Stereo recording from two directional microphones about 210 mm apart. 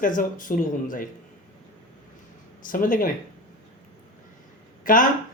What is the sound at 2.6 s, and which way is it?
Speech, 40° left (ahead or behind).